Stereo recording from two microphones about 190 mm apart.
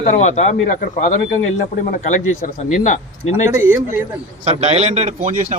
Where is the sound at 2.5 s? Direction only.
40° left (ahead or behind).